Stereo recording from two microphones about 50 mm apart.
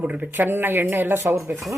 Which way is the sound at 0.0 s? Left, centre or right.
Right.